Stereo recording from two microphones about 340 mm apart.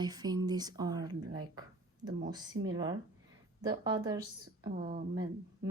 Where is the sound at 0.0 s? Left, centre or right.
Centre.